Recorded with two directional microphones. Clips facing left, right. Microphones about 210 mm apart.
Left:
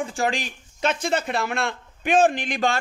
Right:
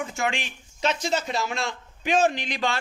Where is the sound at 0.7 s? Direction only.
55° left (ahead or behind).